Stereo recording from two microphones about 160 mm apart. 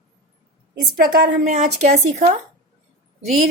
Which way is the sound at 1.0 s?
50° right (ahead or behind).